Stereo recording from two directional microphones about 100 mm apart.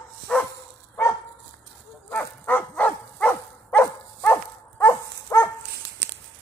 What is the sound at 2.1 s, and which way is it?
Dog, 10° left (ahead or behind).